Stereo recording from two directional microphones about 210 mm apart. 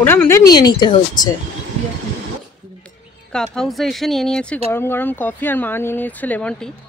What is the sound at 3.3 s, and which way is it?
Speech, centre (ahead or behind).